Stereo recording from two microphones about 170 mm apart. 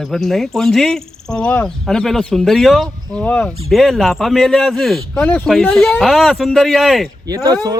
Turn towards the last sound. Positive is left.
turn(degrees=-20)  # may be behind; listen again after turning